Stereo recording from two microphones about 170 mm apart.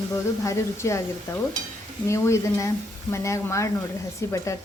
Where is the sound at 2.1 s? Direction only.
15° left (ahead or behind).